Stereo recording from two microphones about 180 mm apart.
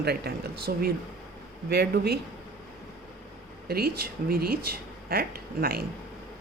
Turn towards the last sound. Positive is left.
turn(degrees=-55)  # may be behind; listen again after turning